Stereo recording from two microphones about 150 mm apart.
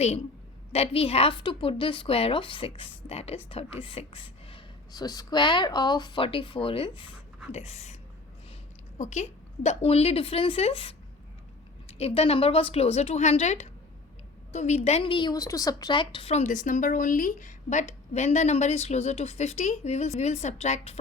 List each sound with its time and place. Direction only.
0.7 s a woman's voice: 40° left (ahead or behind)
4.9 s a woman's voice: 25° left (ahead or behind); by 7.9 s 45° left (ahead or behind)
9.0 s a woman's voice: 55° left (ahead or behind)